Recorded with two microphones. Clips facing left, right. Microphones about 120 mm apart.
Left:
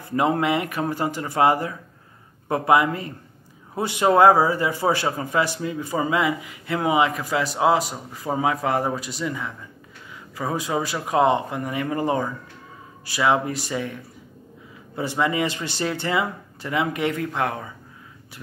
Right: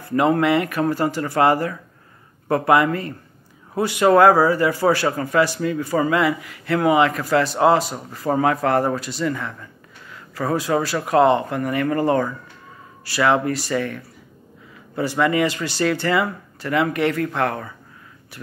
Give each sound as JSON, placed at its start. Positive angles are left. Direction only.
{"t": 0.0, "sound": "a man's voice", "side_deg": 15}